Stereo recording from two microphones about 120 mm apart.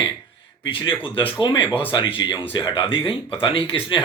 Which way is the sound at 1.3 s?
45° left (ahead or behind).